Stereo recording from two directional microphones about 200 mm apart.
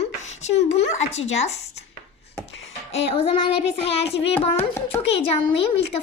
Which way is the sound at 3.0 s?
30° left (ahead or behind).